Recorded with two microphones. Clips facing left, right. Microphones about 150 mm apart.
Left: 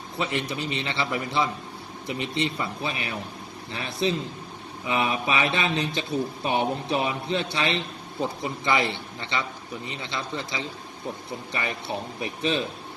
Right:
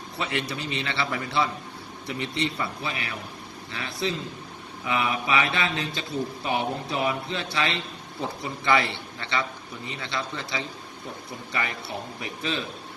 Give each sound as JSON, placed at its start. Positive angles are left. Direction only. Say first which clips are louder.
{"t": 0.2, "sound": "a man's voice", "louder": "left 2 dB", "side_deg": 20}